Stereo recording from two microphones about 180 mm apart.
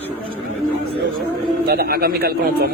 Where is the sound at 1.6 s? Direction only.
60° right (ahead or behind).